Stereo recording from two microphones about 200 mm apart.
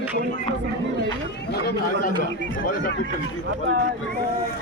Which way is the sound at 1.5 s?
50° left (ahead or behind).